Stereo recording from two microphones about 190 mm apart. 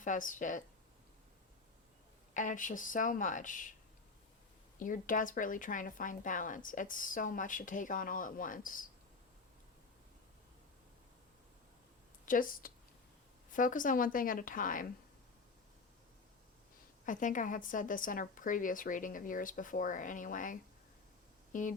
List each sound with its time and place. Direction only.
0.0 s a woman's voice: 45° left (ahead or behind)
2.3 s a woman's voice: 40° left (ahead or behind)
4.8 s a woman's voice: 45° left (ahead or behind)
12.2 s a woman's voice: 45° left (ahead or behind)
17.1 s a woman's voice: 45° left (ahead or behind)